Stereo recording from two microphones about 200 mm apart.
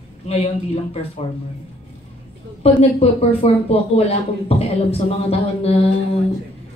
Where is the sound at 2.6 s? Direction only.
30° left (ahead or behind).